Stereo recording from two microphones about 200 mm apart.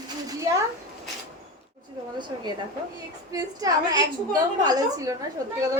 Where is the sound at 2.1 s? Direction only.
20° right (ahead or behind).